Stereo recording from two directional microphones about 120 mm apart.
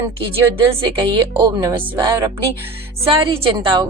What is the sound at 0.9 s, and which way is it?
A woman's voice, 40° right (ahead or behind).